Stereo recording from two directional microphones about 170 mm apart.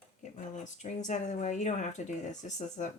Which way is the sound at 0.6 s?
45° left (ahead or behind).